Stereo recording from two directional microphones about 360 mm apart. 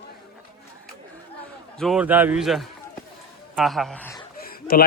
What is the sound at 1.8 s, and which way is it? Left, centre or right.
A man's voice, centre.